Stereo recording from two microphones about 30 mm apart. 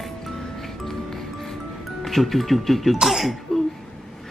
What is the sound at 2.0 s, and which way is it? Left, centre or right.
Speech, centre.